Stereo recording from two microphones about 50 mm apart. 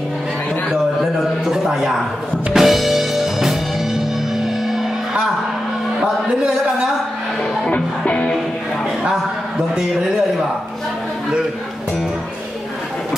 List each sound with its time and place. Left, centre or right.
1.4 s a sound: centre
2.5 s music: centre
7.6 s music: left
9.1 s a man's voice: centre